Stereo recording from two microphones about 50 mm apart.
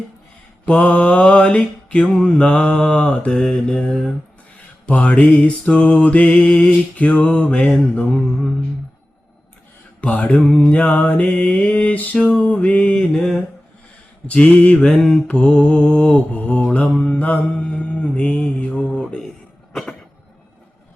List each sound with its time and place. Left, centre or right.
0.6 s mantra: left
3.4 s mantra: centre; by 7.6 s left
7.6 s mantra: centre
10.0 s mantra: left
13.1 s mantra: centre
14.9 s mantra: centre
15.3 s mantra: left
19.7 s a sound: centre